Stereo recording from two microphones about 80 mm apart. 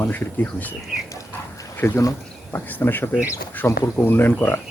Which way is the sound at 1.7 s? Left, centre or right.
Left.